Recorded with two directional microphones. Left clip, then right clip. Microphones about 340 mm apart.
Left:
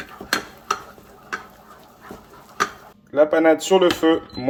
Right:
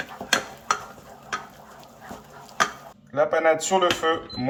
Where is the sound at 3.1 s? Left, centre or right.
Left.